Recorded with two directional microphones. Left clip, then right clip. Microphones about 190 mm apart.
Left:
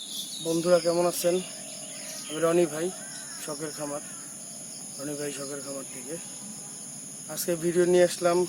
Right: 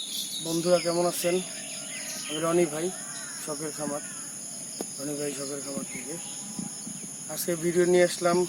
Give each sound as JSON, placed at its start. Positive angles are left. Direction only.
{"t": 0.4, "sound": "speech", "side_deg": 20}
{"t": 2.4, "sound": "speech", "side_deg": 10}
{"t": 5.0, "sound": "speech", "side_deg": 15}
{"t": 7.3, "sound": "speech", "side_deg": 10}